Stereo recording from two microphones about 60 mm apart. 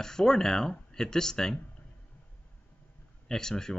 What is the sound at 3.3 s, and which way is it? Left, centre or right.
Speech, centre.